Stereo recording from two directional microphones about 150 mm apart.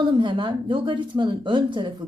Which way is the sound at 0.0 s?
30° right (ahead or behind).